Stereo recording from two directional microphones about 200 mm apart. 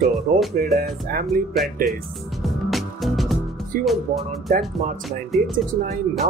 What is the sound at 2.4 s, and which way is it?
Music, centre (ahead or behind).